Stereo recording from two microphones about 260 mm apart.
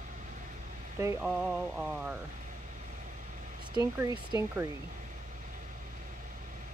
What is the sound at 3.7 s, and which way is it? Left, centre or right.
Speech, centre.